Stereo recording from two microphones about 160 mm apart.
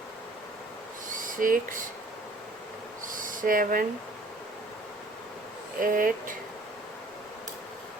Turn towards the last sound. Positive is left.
turn(degrees=-60)  # may be behind; listen again after turning